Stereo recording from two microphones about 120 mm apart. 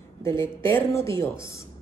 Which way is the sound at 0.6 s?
20° left (ahead or behind).